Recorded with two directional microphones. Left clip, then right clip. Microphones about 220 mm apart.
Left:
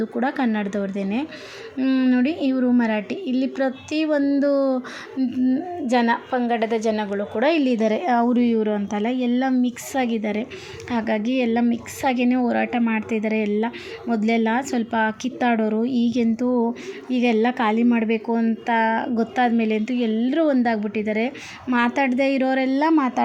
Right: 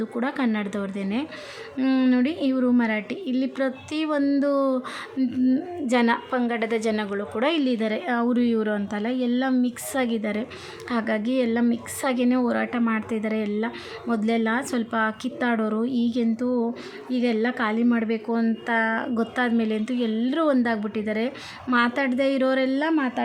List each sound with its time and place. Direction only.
0.0 s a woman's voice: centre (ahead or behind)